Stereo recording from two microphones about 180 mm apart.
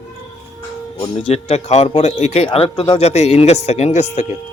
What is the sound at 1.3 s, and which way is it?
Speech, 35° left (ahead or behind).